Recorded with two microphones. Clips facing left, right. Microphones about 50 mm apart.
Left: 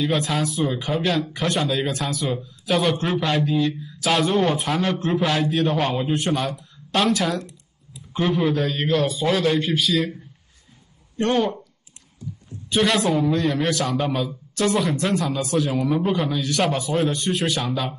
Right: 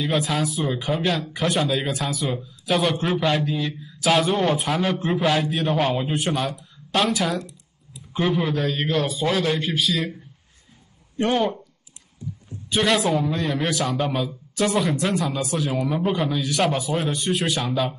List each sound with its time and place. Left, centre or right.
0.0 s speech: centre
11.1 s speech: centre
12.6 s speech: centre